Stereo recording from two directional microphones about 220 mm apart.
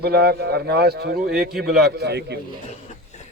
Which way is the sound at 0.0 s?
45° right (ahead or behind).